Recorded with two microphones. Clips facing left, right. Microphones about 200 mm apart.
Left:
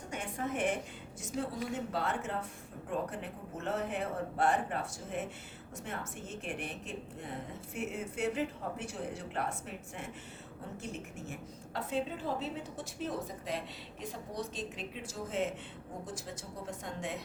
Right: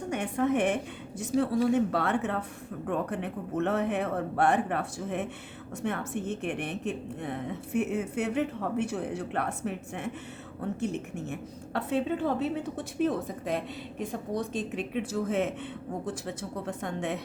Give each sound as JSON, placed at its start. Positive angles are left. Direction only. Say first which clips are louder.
{"t": 0.1, "sound": "a woman's voice", "louder": "right 10 dB", "side_deg": -70}
{"t": 11.3, "sound": "speech", "louder": "right 7 dB", "side_deg": -65}